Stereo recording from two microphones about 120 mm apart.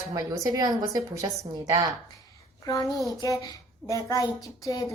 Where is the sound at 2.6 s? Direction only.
30° left (ahead or behind).